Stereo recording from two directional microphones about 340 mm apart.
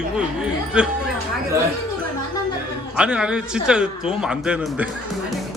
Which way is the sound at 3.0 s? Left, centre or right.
Centre.